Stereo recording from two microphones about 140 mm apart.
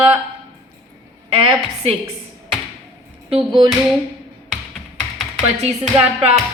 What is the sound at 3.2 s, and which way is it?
Speech, 35° right (ahead or behind).